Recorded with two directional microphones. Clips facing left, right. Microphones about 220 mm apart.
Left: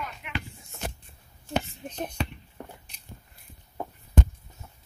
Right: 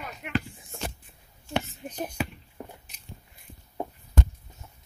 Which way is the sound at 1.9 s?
10° right (ahead or behind).